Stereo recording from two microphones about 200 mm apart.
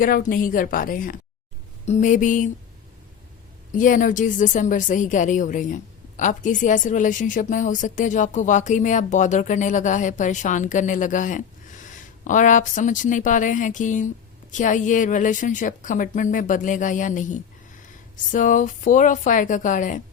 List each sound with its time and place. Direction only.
0.0 s a woman's voice: 45° left (ahead or behind)
3.7 s speech: 40° left (ahead or behind)